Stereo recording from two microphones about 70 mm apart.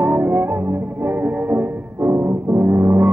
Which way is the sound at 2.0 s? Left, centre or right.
Right.